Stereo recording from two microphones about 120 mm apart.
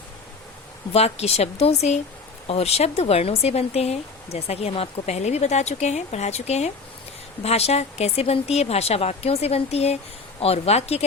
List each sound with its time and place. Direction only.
0.9 s speech: 60° left (ahead or behind)